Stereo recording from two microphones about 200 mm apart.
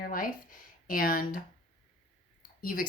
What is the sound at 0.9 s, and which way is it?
Speech, 45° left (ahead or behind).